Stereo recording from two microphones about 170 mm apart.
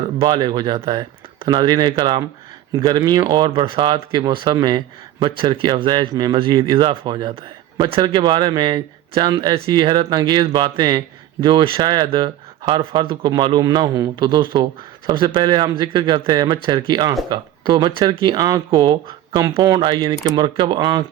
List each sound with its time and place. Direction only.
0.2 s speech: 25° right (ahead or behind)